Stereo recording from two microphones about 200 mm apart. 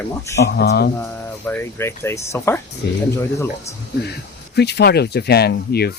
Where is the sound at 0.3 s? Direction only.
55° left (ahead or behind).